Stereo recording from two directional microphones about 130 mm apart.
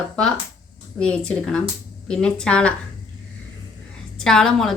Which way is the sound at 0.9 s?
5° left (ahead or behind).